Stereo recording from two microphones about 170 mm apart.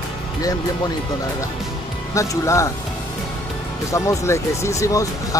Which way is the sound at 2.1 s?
20° left (ahead or behind).